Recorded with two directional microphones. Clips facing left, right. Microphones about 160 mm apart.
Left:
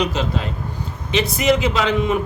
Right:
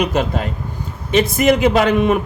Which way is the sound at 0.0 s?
55° right (ahead or behind).